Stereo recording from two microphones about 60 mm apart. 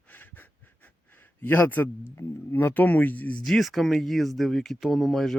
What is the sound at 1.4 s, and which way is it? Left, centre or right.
Speech, left.